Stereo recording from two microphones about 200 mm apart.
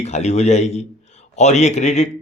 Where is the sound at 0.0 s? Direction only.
35° left (ahead or behind).